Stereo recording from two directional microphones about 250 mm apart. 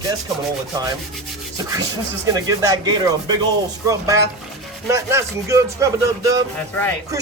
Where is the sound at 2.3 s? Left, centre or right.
Centre.